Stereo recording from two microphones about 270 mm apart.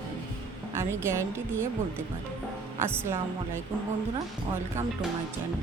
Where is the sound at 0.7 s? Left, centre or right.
Centre.